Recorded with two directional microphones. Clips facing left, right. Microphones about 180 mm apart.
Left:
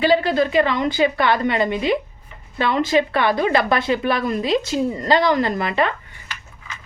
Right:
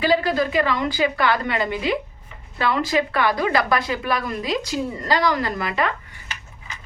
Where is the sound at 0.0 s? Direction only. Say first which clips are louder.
Left 3 dB; 25° left (ahead or behind).